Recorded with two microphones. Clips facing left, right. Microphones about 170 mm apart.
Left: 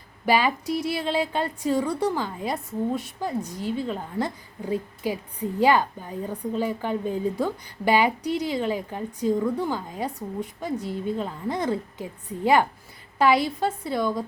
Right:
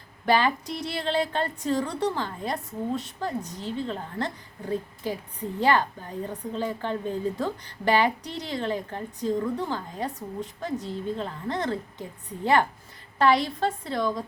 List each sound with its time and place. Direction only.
0.3 s a woman's voice: 10° left (ahead or behind)
13.1 s a woman's voice: 10° left (ahead or behind)